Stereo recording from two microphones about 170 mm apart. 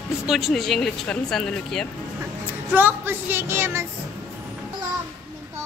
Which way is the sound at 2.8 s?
10° right (ahead or behind).